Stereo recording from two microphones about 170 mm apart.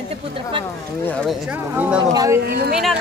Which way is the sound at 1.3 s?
10° right (ahead or behind).